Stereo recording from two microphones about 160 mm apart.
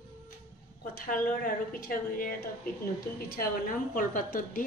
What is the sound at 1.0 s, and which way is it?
Dishes, 60° left (ahead or behind).